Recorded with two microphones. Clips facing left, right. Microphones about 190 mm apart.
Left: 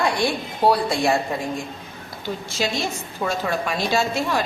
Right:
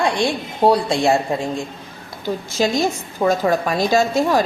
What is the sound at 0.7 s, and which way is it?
Speech, 25° right (ahead or behind).